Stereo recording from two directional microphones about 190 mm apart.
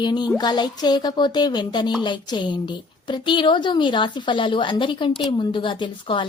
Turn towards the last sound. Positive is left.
turn(degrees=25)  # may be behind; listen again after turning